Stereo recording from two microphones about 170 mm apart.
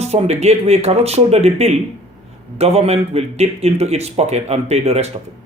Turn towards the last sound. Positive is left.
turn(degrees=-35)  # may be behind; listen again after turning